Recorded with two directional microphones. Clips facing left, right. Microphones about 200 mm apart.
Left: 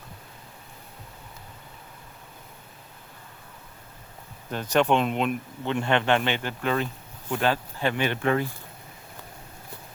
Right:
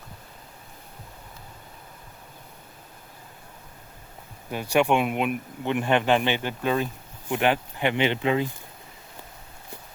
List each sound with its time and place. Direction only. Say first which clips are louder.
4.5 s speech: right 1 dB; 10° right (ahead or behind)